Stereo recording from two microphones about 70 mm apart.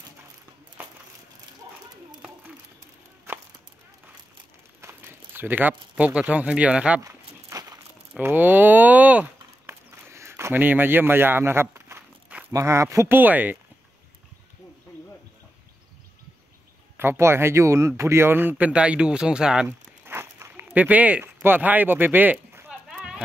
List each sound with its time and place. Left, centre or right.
3.3 s chop: right
4.8 s speech: right; by 7.0 s centre
7.0 s a sound: right
8.2 s speech: right
9.7 s a sound: right
10.5 s a man's voice: right
13.1 s speech: right
16.9 s a man's voice: right
18.7 s speech: centre
20.1 s a sound: right
20.7 s speech: right
22.7 s a sound: centre